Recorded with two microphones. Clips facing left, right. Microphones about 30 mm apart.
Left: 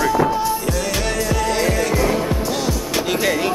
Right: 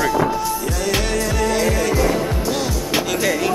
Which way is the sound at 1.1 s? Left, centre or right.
Centre.